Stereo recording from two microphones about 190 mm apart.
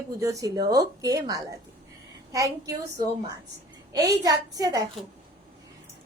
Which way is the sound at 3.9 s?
20° right (ahead or behind).